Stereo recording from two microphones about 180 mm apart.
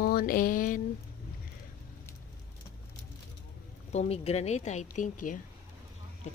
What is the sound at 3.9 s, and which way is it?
Speech, 35° left (ahead or behind).